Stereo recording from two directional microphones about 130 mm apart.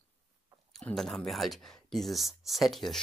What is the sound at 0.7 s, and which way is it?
Speech, 5° left (ahead or behind).